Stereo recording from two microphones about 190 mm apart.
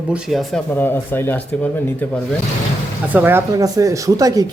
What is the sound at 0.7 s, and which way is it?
Speech, 10° left (ahead or behind).